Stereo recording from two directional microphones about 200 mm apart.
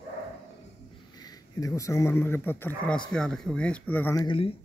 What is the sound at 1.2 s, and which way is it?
Speech, 15° left (ahead or behind).